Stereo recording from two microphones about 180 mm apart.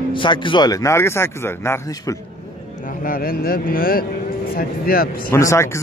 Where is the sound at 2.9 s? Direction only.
50° left (ahead or behind).